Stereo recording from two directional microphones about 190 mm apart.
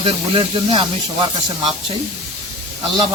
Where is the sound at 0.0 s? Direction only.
25° right (ahead or behind).